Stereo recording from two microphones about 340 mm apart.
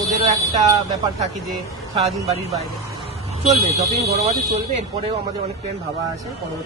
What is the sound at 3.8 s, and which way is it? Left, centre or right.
Speech, centre.